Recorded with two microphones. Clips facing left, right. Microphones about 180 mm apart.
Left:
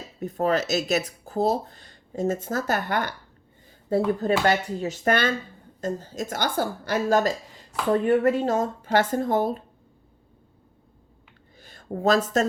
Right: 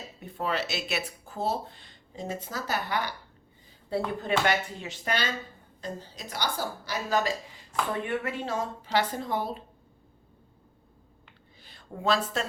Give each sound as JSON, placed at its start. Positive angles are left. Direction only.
{"t": 0.2, "sound": "speech", "side_deg": 40}
{"t": 11.6, "sound": "a woman's voice", "side_deg": 45}